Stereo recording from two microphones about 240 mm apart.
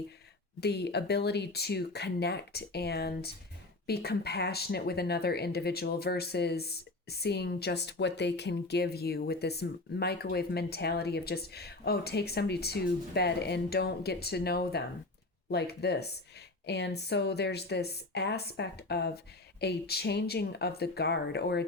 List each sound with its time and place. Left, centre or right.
0.6 s speech: left